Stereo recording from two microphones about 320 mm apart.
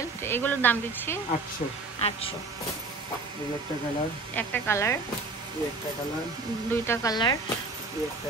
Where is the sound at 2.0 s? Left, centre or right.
Centre.